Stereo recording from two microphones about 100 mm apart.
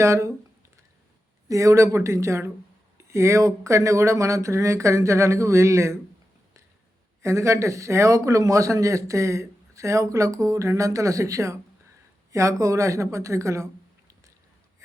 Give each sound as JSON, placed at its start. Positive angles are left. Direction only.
{"t": 0.0, "sound": "speech", "side_deg": -30}
{"t": 1.5, "sound": "speech", "side_deg": -30}
{"t": 7.2, "sound": "speech", "side_deg": -30}